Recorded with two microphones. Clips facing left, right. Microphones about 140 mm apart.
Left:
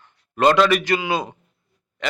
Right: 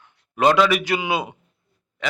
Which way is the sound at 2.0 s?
5° right (ahead or behind).